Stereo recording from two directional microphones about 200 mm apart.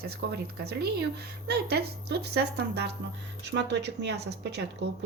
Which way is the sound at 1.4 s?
55° right (ahead or behind).